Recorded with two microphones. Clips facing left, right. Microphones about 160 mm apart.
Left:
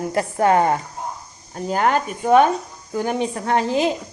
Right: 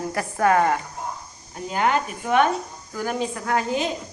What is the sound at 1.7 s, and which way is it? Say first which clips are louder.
Speech: left 3 dB; 40° left (ahead or behind).